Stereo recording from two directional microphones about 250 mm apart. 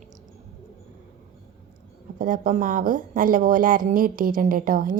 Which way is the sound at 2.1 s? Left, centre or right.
Right.